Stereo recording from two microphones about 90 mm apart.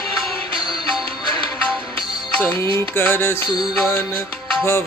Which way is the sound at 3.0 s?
25° left (ahead or behind).